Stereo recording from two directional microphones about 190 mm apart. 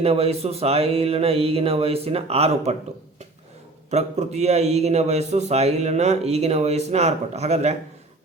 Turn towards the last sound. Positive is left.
turn(degrees=-35)  # may be behind; listen again after turning